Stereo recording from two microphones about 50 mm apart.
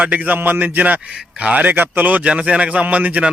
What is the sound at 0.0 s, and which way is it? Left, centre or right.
Speech, right.